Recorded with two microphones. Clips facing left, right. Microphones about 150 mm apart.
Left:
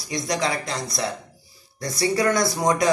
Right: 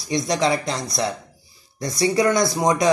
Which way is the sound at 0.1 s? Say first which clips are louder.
Right 4 dB; 25° right (ahead or behind).